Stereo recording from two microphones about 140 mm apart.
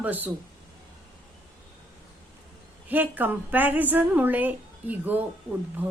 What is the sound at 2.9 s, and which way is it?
A woman's voice, 15° right (ahead or behind).